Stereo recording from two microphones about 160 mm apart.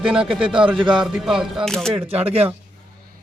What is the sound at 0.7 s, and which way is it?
Speech, 30° right (ahead or behind).